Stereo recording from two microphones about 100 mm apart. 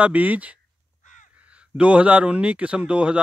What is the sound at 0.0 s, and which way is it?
A man's voice, 15° right (ahead or behind).